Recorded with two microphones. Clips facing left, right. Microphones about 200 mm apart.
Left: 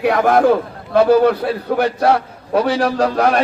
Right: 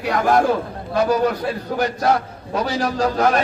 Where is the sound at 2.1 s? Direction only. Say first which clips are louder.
Left 4 dB; 30° left (ahead or behind).